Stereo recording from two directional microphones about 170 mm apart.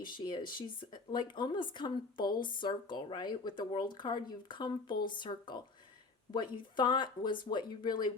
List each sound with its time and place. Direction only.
0.0 s speech: 25° left (ahead or behind)